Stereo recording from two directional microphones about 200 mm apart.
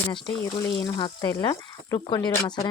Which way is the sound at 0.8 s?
20° left (ahead or behind).